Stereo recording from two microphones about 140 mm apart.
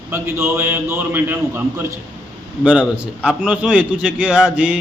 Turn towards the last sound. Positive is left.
turn(degrees=-10)  # may be behind; listen again after turning